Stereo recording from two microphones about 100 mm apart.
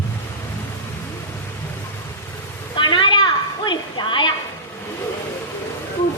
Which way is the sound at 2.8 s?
55° left (ahead or behind).